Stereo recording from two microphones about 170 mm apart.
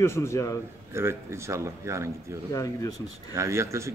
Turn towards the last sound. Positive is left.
turn(degrees=-15)  # may be behind; listen again after turning